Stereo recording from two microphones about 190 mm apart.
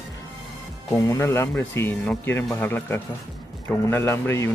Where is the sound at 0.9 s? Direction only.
15° left (ahead or behind).